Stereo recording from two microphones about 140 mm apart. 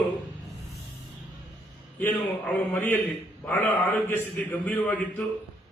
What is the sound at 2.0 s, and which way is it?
A man's voice, 15° left (ahead or behind).